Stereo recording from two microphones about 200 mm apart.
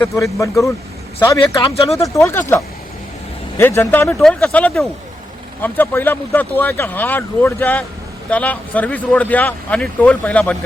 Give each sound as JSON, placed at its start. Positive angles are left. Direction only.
{"t": 0.0, "sound": "speech", "side_deg": 15}
{"t": 3.6, "sound": "speech", "side_deg": 10}